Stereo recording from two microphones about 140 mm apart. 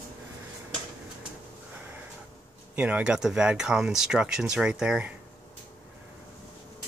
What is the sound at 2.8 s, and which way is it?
Speech, 10° right (ahead or behind).